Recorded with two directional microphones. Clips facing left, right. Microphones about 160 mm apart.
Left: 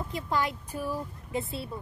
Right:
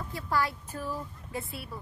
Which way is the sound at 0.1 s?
20° left (ahead or behind).